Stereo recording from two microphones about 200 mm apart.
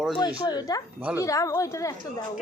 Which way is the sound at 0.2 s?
20° left (ahead or behind).